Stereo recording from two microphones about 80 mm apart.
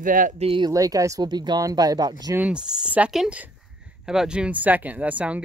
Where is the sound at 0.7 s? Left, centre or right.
Right.